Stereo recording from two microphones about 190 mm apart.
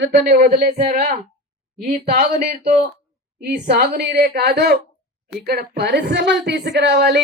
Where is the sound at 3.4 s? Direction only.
60° right (ahead or behind).